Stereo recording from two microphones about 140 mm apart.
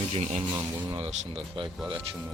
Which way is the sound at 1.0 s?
45° right (ahead or behind).